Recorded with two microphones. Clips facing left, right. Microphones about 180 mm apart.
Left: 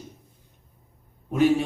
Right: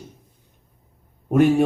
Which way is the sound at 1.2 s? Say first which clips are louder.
Right 4 dB; 55° right (ahead or behind).